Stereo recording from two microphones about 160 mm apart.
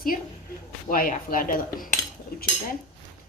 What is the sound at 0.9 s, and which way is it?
Speech, 60° left (ahead or behind).